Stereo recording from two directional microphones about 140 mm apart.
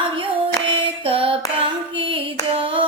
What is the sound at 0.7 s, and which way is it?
Female singing, 40° right (ahead or behind).